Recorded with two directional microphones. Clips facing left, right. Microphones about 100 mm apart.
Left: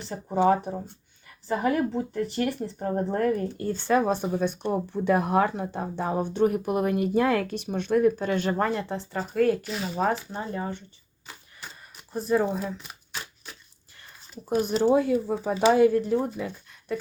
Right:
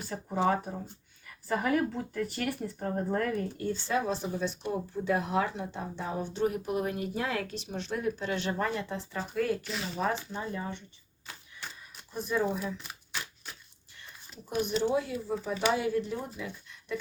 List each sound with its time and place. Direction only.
0.1 s speech: 30° left (ahead or behind)
3.8 s speech: 55° left (ahead or behind); by 9.0 s 40° left (ahead or behind)
9.1 s speech: 55° left (ahead or behind)
10.0 s speech: 40° left (ahead or behind)
12.1 s speech: 35° left (ahead or behind)
14.5 s speech: 40° left (ahead or behind)